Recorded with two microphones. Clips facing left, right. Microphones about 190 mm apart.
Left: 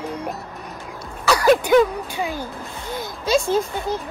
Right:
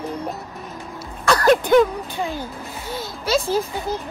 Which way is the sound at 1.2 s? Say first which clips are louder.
Even; 10° left (ahead or behind).